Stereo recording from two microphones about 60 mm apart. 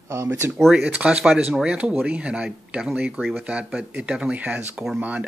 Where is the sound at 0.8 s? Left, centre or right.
Centre.